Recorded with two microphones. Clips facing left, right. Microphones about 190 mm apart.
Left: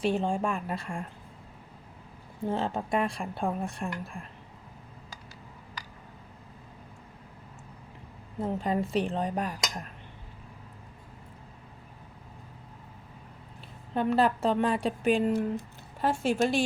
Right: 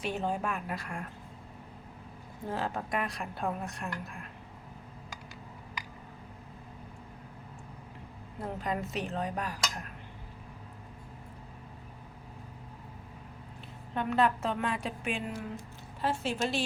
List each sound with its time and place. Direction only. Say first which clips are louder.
0.0 s speech: left 5 dB; 30° left (ahead or behind)
2.5 s speech: left 4 dB; 25° left (ahead or behind)
8.4 s a woman's voice: left 6 dB; 30° left (ahead or behind)
13.9 s a woman's voice: left 3 dB; 35° left (ahead or behind)
15.3 s speech: left 10 dB; 55° left (ahead or behind)